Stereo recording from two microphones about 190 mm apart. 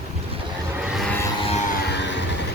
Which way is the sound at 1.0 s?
10° left (ahead or behind).